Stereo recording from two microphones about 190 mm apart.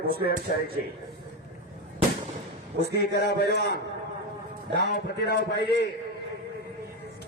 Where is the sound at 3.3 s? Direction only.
60° left (ahead or behind).